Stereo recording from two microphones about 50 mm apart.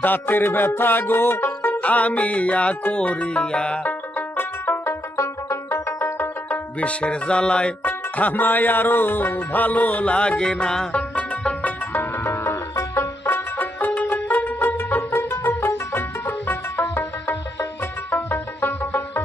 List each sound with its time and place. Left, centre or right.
0.0 s music: left
1.8 s music: left
4.4 s music: left
5.1 s music: left
6.8 s music: left
7.8 s music: left; by 10.9 s centre
10.9 s music: left
11.9 s music: left
12.4 s music: left
13.6 s music: left